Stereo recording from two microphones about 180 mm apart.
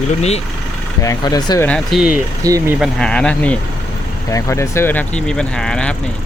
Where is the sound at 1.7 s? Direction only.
5° right (ahead or behind).